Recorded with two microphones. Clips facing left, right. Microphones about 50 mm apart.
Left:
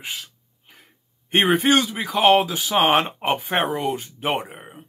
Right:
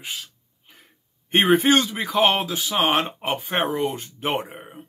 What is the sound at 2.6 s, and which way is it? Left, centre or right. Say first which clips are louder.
Speech: left 3 dB; centre.